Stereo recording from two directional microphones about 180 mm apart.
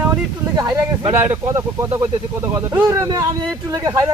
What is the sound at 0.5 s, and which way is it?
Speech, 20° right (ahead or behind).